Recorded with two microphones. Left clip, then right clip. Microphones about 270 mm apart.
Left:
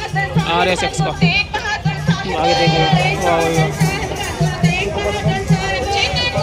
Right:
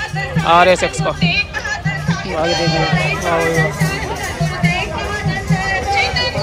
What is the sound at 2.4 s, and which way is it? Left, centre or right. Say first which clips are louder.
Speech: left 2 dB; centre.